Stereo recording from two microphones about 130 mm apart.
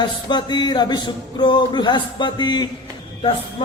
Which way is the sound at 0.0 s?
35° left (ahead or behind).